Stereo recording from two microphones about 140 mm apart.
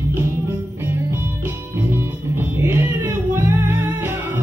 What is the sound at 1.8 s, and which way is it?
Music, 15° right (ahead or behind).